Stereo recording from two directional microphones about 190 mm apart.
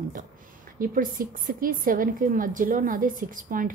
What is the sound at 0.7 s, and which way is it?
A woman's voice, 50° right (ahead or behind).